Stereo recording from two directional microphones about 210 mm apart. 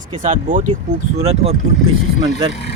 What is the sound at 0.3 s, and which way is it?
Speech, 40° right (ahead or behind).